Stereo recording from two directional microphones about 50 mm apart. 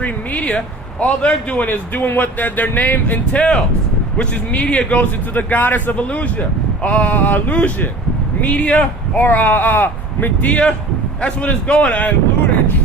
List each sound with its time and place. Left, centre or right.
0.3 s a man's voice: centre; by 3.2 s left
3.3 s speech: centre
4.9 s a man's voice: left
10.5 s speech: centre